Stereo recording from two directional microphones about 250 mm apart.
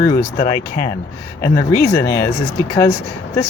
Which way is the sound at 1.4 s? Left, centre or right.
Centre.